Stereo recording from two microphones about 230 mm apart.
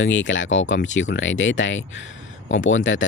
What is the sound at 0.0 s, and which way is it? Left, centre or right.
Speech, left.